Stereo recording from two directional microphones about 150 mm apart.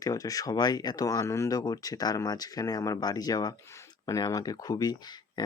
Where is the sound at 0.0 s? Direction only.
25° left (ahead or behind).